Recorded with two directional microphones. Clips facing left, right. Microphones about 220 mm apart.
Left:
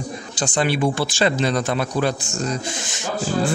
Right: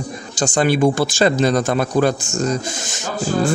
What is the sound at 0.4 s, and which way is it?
A man's voice, 45° right (ahead or behind).